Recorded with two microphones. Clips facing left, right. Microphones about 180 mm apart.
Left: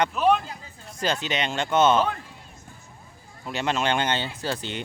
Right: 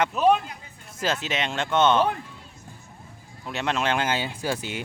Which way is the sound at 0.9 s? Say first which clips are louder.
Left 1 dB; centre (ahead or behind).